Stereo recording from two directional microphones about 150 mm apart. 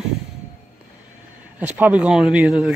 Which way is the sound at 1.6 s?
10° right (ahead or behind).